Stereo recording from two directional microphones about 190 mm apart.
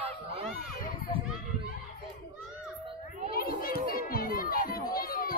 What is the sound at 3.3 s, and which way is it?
Children playing, 50° left (ahead or behind).